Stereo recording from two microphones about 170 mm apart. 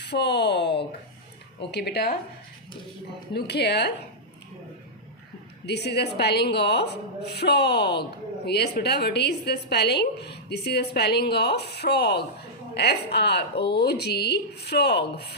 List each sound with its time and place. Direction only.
0.0 s speech: 80° left
1.7 s a woman's voice: 75° left (ahead or behind)
3.3 s a woman's voice: 80° left
5.6 s a woman's voice: 75° left (ahead or behind)